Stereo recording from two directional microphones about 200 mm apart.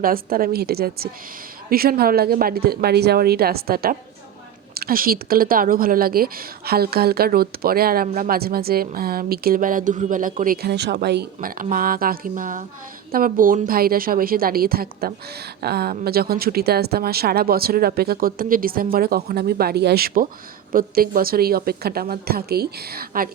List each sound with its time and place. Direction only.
0.0 s a woman's voice: 45° right (ahead or behind)